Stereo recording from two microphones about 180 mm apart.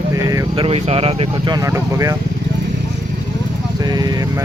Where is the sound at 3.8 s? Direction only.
20° right (ahead or behind).